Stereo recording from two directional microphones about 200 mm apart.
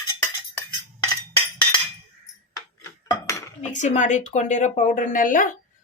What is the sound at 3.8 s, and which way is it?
A woman's voice, 35° left (ahead or behind).